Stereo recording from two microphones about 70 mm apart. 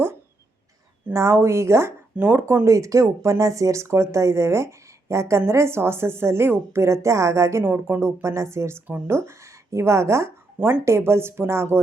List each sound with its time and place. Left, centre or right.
1.1 s speech: right
2.1 s speech: right
2.6 s speech: right
7.6 s speech: right